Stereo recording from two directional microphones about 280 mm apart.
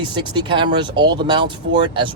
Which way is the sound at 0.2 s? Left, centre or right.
Centre.